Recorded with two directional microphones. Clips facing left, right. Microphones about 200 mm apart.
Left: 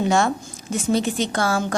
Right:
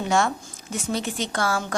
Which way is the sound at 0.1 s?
30° left (ahead or behind).